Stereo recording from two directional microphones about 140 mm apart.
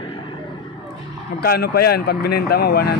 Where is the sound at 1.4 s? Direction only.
90° left.